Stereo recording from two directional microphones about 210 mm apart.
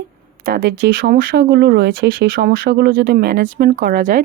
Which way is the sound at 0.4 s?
45° right (ahead or behind).